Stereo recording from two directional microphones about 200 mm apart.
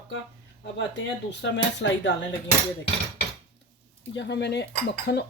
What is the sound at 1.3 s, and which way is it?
Cutlery, 60° left (ahead or behind).